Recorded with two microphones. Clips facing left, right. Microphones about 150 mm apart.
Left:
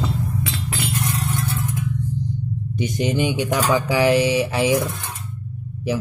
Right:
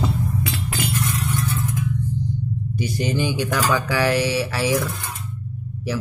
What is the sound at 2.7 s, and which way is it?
Speech, 20° left (ahead or behind).